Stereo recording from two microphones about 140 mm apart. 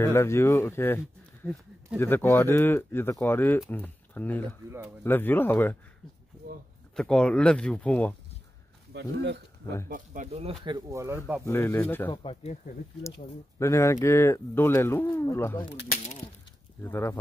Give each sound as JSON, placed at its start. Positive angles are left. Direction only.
{"t": 0.0, "sound": "speech", "side_deg": 20}
{"t": 7.0, "sound": "speech", "side_deg": 5}
{"t": 9.8, "sound": "speech", "side_deg": -65}
{"t": 10.9, "sound": "speech", "side_deg": -20}
{"t": 11.4, "sound": "speech", "side_deg": 15}
{"t": 12.1, "sound": "speech", "side_deg": 40}
{"t": 13.6, "sound": "speech", "side_deg": 20}
{"t": 16.8, "sound": "speech", "side_deg": 15}